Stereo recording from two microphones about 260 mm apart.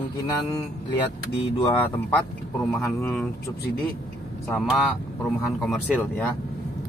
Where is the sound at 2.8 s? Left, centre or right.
Centre.